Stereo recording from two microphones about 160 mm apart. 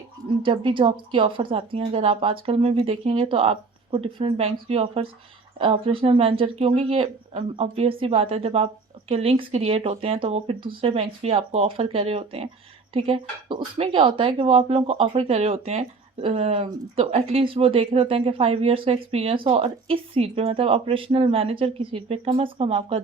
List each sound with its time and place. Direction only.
0.3 s a woman's voice: 35° right (ahead or behind)